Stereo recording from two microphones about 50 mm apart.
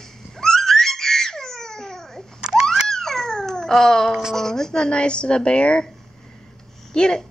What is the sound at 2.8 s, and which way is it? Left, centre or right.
Babbling, centre.